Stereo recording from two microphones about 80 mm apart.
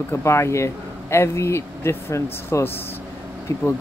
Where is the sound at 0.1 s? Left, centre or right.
Left.